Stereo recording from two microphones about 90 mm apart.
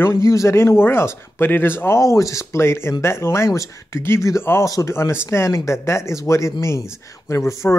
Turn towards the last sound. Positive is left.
turn(degrees=35)  # may be behind; listen again after turning